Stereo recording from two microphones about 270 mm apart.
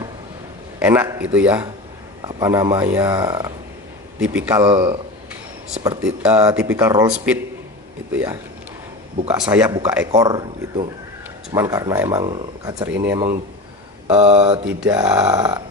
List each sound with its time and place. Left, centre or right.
0.7 s speech: centre
9.4 s speech: centre
14.0 s mantra: right
14.8 s speech: centre